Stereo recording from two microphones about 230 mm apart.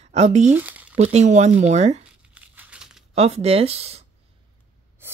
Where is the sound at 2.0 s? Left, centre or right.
Centre.